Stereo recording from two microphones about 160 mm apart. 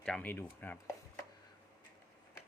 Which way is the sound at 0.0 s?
10° left (ahead or behind).